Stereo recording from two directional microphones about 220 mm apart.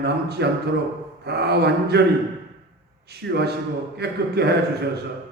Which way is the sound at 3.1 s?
45° right (ahead or behind).